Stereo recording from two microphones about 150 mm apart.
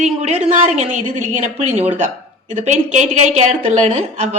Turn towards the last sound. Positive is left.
turn(degrees=-45)  # may be behind; listen again after turning